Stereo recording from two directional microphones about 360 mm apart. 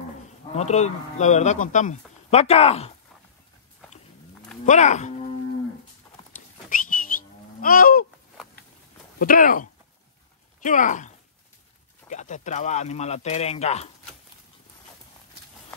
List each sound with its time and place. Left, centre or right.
0.6 s speech: centre
4.6 s speech: centre
6.7 s cattle: left
9.2 s speech: left